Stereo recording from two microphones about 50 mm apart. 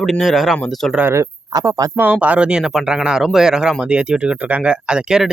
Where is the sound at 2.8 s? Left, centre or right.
Centre.